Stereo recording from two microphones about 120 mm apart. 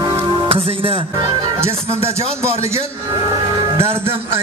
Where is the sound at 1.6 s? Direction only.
20° right (ahead or behind).